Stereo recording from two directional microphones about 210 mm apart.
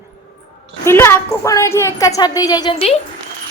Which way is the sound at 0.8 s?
10° left (ahead or behind).